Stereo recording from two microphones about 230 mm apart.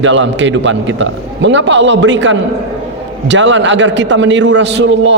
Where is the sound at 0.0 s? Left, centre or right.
Right.